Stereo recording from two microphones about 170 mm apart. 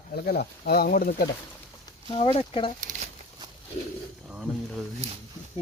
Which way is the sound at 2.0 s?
35° left (ahead or behind).